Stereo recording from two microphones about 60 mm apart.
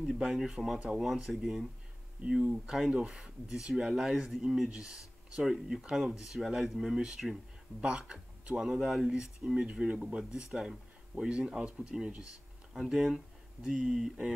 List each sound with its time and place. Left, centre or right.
0.0 s speech: centre
2.2 s speech: centre